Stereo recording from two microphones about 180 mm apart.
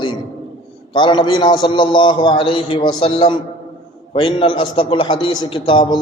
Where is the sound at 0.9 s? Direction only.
25° left (ahead or behind).